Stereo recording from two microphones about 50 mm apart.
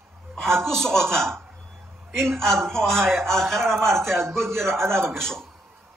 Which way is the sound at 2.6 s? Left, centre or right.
Centre.